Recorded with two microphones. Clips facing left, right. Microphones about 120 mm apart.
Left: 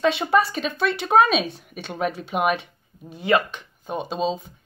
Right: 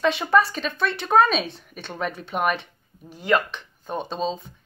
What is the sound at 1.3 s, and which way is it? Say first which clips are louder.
Speech: left 2 dB; centre (ahead or behind).